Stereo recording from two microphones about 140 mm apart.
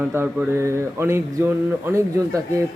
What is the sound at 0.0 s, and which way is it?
A man's voice, 10° right (ahead or behind).